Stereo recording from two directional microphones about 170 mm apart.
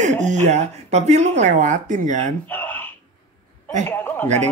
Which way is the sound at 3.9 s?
10° left (ahead or behind).